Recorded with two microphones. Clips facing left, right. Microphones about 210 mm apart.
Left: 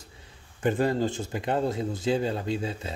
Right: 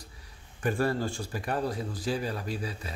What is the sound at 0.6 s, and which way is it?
Speech, 20° left (ahead or behind).